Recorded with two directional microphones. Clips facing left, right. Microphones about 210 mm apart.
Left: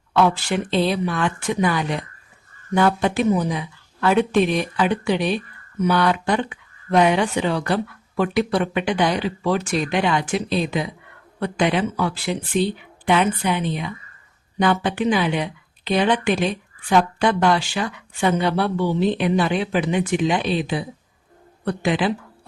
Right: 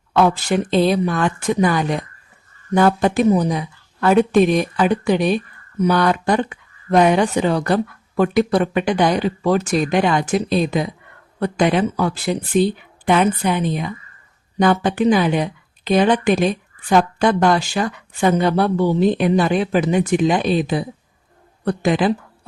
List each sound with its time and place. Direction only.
0.1 s a woman's voice: 45° right (ahead or behind)